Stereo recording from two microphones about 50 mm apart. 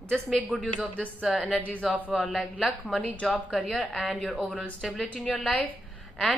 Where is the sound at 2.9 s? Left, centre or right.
Left.